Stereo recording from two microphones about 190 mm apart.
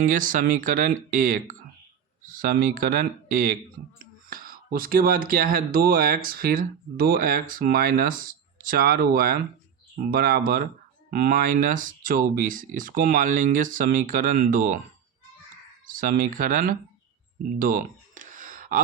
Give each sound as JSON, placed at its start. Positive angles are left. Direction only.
{"t": 0.0, "sound": "speech", "side_deg": -45}
{"t": 15.9, "sound": "speech", "side_deg": -45}
{"t": 17.6, "sound": "a sound", "side_deg": -45}